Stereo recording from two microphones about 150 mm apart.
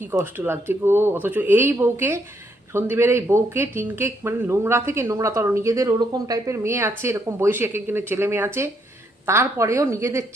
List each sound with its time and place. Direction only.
0.0 s a woman's voice: 15° right (ahead or behind)